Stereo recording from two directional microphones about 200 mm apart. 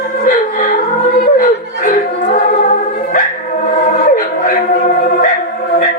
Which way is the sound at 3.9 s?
40° left (ahead or behind).